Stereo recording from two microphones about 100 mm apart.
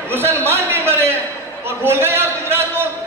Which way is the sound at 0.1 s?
25° right (ahead or behind).